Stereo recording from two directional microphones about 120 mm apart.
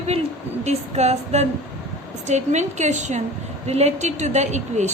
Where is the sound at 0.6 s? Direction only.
65° right (ahead or behind).